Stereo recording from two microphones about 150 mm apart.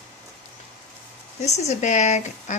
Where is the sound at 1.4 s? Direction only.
50° left (ahead or behind).